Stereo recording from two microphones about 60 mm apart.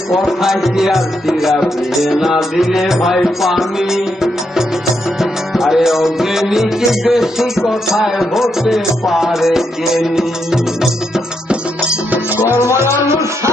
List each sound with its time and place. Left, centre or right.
0.3 s music: centre
12.7 s music: right